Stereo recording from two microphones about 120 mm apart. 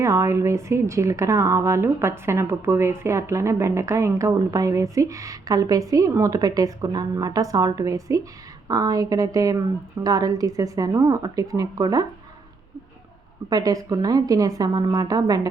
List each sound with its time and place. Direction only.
0.0 s a woman's voice: 25° right (ahead or behind)
13.5 s a woman's voice: 30° right (ahead or behind)